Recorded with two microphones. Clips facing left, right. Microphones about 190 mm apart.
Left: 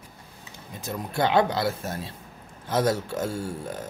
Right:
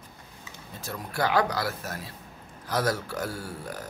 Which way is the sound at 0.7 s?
20° left (ahead or behind).